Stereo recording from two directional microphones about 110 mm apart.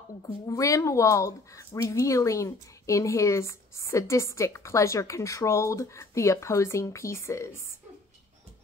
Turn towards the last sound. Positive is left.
turn(degrees=25)  # may be behind; listen again after turning